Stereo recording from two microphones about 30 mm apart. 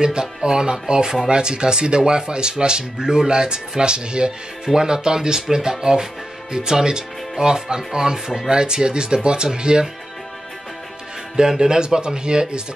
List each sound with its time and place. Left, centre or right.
0.0 s speech: right
8.5 s speech: right
11.3 s speech: right